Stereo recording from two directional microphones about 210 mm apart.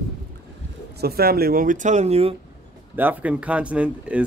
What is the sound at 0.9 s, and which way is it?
Speech, 45° right (ahead or behind).